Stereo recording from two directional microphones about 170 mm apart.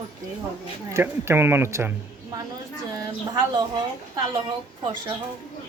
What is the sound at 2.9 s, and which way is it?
Speech, 25° right (ahead or behind).